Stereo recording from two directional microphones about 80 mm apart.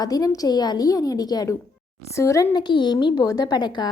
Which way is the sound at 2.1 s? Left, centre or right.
Left.